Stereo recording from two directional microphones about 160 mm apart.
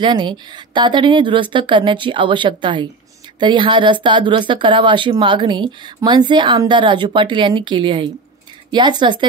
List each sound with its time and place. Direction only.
0.0 s speech: 30° right (ahead or behind)